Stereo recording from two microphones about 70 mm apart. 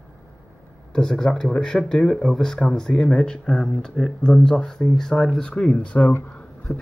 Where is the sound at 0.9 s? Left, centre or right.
Centre.